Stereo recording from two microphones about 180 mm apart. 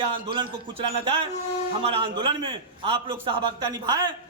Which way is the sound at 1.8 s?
30° right (ahead or behind).